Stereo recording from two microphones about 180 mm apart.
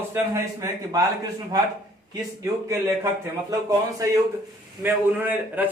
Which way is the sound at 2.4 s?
15° right (ahead or behind).